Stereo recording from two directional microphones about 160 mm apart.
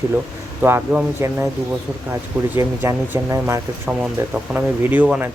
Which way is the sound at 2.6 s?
15° right (ahead or behind).